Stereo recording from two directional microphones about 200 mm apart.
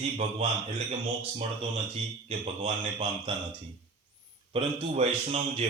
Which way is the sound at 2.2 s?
30° right (ahead or behind).